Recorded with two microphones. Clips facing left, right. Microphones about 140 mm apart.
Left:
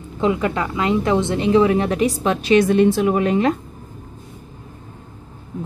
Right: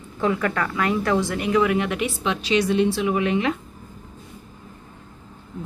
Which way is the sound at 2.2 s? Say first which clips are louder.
Left 5 dB; 50° left (ahead or behind).